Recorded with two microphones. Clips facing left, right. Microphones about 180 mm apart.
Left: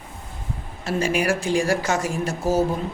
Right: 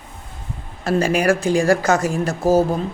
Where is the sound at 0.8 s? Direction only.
40° right (ahead or behind).